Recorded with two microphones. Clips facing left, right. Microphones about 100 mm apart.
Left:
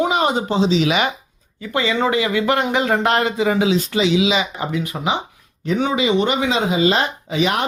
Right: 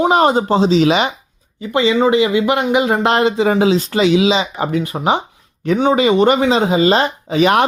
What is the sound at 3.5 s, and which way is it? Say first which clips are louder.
Speech: right 4 dB; 40° right (ahead or behind).